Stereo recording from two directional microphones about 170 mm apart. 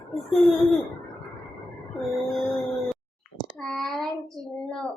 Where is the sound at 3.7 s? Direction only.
Centre (ahead or behind).